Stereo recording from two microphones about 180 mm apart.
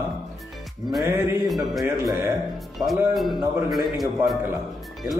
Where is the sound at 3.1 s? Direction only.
Centre (ahead or behind).